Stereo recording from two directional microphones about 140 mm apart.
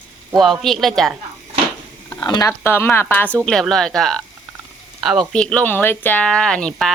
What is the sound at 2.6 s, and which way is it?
Speech, 15° left (ahead or behind).